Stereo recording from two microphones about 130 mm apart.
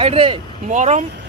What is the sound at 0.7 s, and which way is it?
Speech, 65° right (ahead or behind).